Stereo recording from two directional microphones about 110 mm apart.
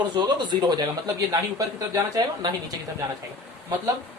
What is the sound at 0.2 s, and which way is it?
Speech, 40° right (ahead or behind).